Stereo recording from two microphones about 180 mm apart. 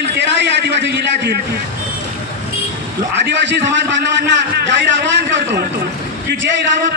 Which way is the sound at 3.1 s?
70° right (ahead or behind).